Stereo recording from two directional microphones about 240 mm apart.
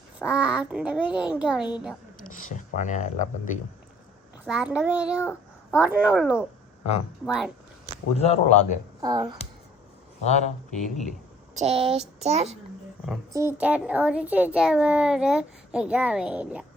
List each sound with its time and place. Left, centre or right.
0.2 s a sound: centre
1.7 s a child's voice: centre
2.1 s speech: left
4.4 s a child's voice: centre
7.9 s a man's voice: left
9.0 s speech: centre
10.2 s speech: left
11.5 s a child's voice: right
13.3 s a child's voice: centre